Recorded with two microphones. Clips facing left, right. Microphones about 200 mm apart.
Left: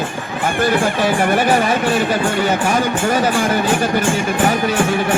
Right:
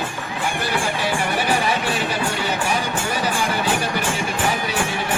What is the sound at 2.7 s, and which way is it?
Speech, 45° left (ahead or behind).